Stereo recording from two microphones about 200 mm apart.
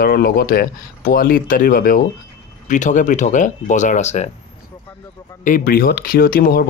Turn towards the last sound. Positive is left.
turn(degrees=45)  # may be behind; listen again after turning